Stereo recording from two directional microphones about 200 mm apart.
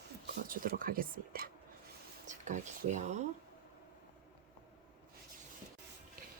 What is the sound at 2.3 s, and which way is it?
Speech, 35° right (ahead or behind).